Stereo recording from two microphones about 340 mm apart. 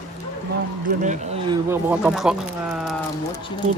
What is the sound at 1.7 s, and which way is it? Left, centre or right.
Speech, centre.